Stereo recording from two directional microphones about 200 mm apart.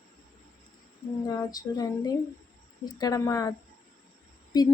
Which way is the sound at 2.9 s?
15° left (ahead or behind).